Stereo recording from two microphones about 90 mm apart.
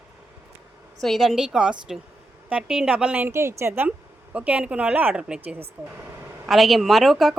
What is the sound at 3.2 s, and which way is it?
Speech, 30° right (ahead or behind).